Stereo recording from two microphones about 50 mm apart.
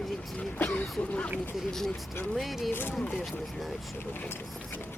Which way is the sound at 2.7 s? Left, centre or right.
Left.